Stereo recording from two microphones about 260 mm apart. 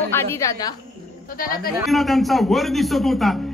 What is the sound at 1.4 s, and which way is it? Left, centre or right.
Speech, left.